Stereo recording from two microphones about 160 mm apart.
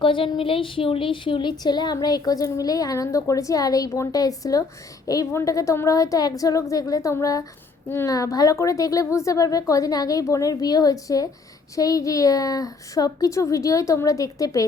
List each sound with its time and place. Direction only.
0.0 s a woman's voice: 35° left (ahead or behind)